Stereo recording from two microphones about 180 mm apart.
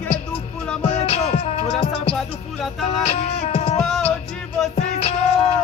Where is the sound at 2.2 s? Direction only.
Centre (ahead or behind).